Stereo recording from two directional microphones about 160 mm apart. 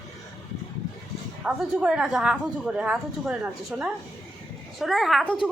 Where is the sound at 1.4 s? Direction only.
5° right (ahead or behind).